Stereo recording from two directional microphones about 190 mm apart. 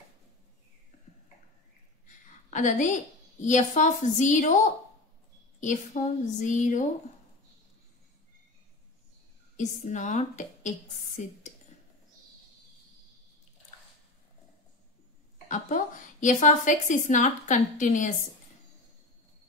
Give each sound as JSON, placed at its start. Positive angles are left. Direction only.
{"t": 2.5, "sound": "a woman's voice", "side_deg": 40}
{"t": 5.6, "sound": "a woman's voice", "side_deg": 40}
{"t": 9.6, "sound": "a woman's voice", "side_deg": 40}
{"t": 15.4, "sound": "a woman's voice", "side_deg": 40}